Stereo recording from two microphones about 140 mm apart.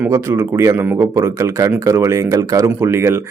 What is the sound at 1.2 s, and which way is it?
Speech, 20° right (ahead or behind).